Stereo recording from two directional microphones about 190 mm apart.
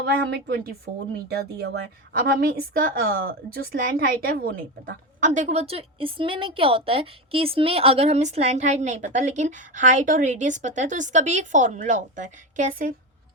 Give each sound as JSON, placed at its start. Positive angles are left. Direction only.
{"t": 0.0, "sound": "a woman's voice", "side_deg": -55}